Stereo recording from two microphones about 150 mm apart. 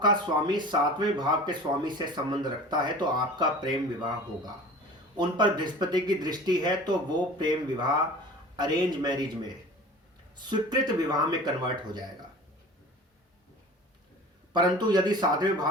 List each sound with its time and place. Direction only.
0.0 s speech: 30° right (ahead or behind)
5.1 s speech: 30° right (ahead or behind)
10.3 s speech: 30° right (ahead or behind)
14.5 s speech: 30° right (ahead or behind)